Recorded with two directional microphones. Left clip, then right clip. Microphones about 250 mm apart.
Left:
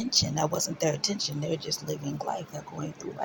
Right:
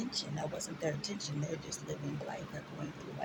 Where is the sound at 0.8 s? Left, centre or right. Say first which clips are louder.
Left 9 dB; left.